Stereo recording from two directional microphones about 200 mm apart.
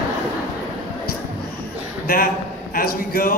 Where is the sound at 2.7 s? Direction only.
45° left (ahead or behind).